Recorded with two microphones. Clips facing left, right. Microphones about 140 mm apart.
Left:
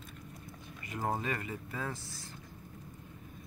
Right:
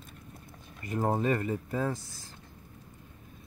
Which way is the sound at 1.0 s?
30° right (ahead or behind).